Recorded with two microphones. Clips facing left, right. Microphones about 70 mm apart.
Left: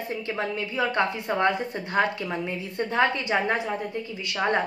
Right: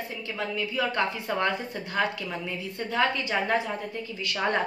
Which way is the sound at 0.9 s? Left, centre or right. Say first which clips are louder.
Left 3 dB; left.